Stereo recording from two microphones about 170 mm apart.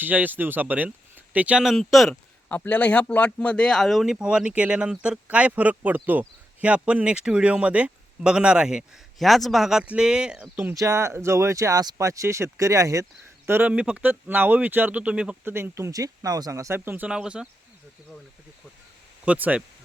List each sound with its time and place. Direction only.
0.0 s speech: 10° right (ahead or behind)
19.2 s speech: 10° right (ahead or behind)